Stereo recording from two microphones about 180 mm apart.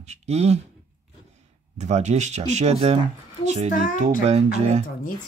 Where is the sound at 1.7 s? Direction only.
40° right (ahead or behind).